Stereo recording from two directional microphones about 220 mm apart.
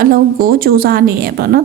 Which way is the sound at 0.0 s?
40° right (ahead or behind).